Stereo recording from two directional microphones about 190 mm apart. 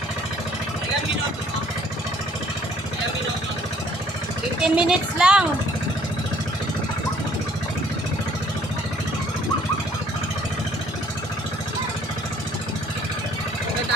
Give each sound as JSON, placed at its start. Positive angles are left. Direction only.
{"t": 4.6, "sound": "a woman's voice", "side_deg": -5}